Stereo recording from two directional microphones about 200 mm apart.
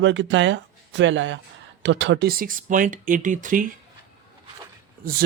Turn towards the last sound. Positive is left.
turn(degrees=-45)  # may be behind; listen again after turning